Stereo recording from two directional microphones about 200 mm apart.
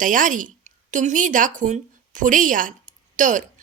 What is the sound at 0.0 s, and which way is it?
A woman's voice, 40° right (ahead or behind).